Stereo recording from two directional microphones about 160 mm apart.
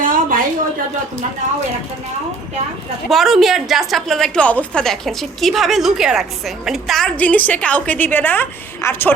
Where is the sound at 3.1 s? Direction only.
Centre (ahead or behind).